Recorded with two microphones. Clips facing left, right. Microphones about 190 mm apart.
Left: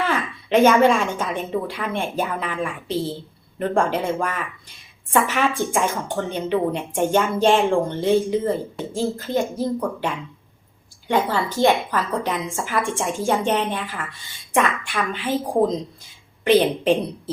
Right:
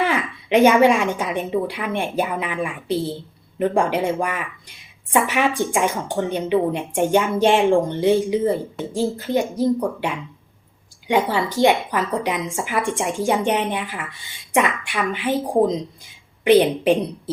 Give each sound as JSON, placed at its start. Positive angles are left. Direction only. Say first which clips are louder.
{"t": 0.0, "sound": "a woman's voice", "louder": "right 2 dB", "side_deg": -15}
{"t": 11.1, "sound": "a woman's voice", "louder": "right 2 dB", "side_deg": -15}